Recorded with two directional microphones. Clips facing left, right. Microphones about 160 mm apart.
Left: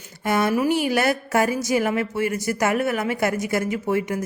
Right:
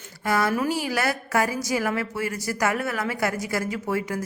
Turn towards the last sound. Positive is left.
turn(degrees=20)  # may be behind; listen again after turning